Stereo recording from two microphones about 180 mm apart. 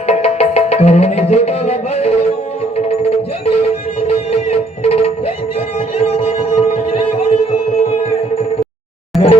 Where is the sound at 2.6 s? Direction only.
35° left (ahead or behind).